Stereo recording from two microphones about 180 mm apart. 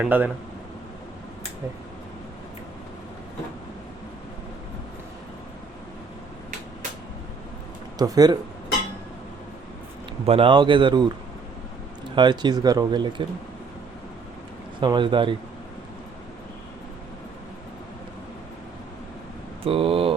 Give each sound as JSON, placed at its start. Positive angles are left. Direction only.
{"t": 0.0, "sound": "speech", "side_deg": -10}
{"t": 7.9, "sound": "speech", "side_deg": -20}
{"t": 10.2, "sound": "speech", "side_deg": -30}
{"t": 12.1, "sound": "speech", "side_deg": -25}
{"t": 14.8, "sound": "speech", "side_deg": -25}
{"t": 19.6, "sound": "speech", "side_deg": -30}